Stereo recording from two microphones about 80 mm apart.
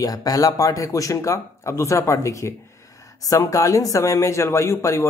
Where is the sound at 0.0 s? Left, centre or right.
Left.